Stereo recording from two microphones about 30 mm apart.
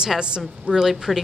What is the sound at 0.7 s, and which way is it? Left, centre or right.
Speech, centre.